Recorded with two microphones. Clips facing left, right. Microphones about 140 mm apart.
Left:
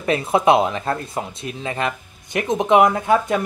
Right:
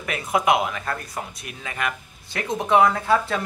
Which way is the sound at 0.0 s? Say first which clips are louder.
Left 6 dB; 30° left (ahead or behind).